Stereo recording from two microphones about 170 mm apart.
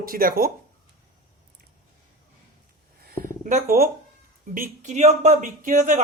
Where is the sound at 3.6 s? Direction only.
60° right (ahead or behind).